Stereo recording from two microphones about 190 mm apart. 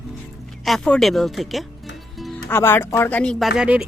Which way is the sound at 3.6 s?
5° right (ahead or behind).